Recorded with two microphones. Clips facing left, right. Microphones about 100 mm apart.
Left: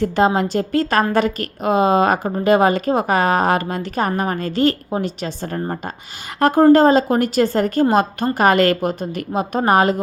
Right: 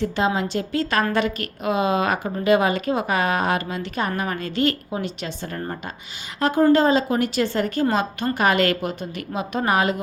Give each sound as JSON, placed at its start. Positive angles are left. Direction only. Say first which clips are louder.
{"t": 0.0, "sound": "a woman's voice", "louder": "left 6 dB", "side_deg": 45}
{"t": 6.4, "sound": "a woman's voice", "louder": "left 6 dB", "side_deg": 50}